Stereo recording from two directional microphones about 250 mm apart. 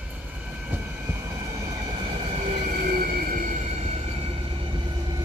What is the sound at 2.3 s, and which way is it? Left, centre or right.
Train, right.